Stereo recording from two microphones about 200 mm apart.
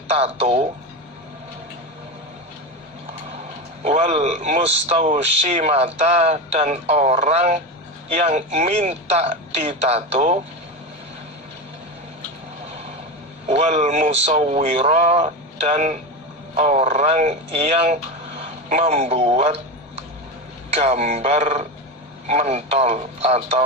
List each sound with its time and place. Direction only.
0.2 s speech: 35° right (ahead or behind)
3.8 s speech: 35° right (ahead or behind)
13.5 s speech: 35° right (ahead or behind)
20.7 s speech: 30° right (ahead or behind)